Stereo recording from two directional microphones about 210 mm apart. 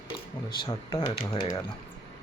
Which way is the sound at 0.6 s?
20° left (ahead or behind).